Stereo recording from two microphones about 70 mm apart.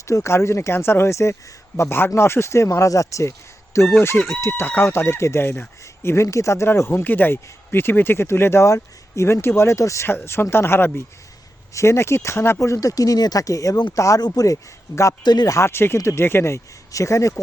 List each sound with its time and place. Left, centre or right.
0.1 s speech: left
4.6 s speech: left
10.1 s speech: left
11.7 s speech: left
14.2 s speech: left
14.4 s speech: left
15.2 s speech: left
15.4 s speech: left